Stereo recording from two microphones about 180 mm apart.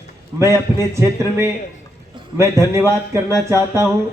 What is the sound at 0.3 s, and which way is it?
Speech, 15° right (ahead or behind).